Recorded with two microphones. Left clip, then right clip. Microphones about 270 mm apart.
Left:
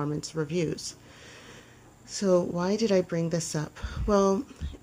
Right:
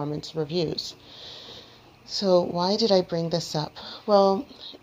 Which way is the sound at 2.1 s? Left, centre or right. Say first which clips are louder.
Right 4 dB; left.